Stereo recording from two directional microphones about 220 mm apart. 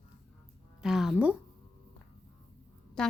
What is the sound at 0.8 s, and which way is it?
Speech, centre (ahead or behind).